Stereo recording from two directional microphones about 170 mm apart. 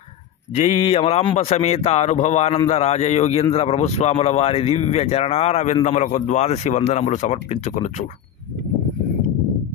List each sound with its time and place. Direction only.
0.6 s speech: 35° left (ahead or behind)